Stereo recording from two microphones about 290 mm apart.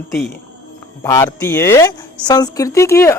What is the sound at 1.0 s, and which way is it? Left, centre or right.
A woman's voice, centre.